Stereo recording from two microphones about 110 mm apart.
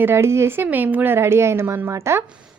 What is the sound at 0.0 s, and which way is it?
A woman's voice, 25° right (ahead or behind).